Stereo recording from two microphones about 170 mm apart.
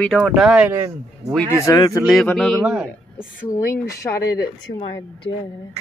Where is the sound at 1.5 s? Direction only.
20° left (ahead or behind).